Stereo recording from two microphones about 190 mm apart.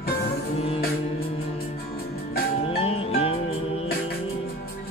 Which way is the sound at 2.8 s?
30° left (ahead or behind).